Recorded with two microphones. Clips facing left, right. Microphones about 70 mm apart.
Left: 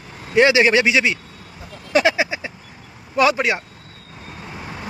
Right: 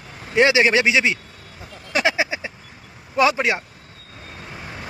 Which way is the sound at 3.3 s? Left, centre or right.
Centre.